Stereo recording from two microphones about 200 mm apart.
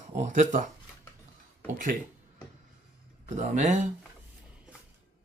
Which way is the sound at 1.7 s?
40° right (ahead or behind).